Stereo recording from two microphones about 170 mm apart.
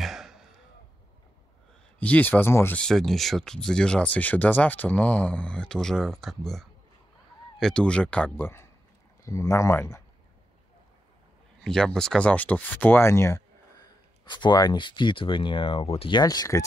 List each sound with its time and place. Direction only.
0.0 s a sound: centre (ahead or behind)
2.0 s speech: 10° left (ahead or behind)
11.6 s speech: 5° left (ahead or behind); by 16.6 s 20° left (ahead or behind)